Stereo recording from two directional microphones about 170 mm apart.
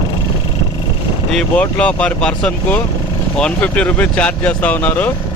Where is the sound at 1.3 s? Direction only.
5° left (ahead or behind).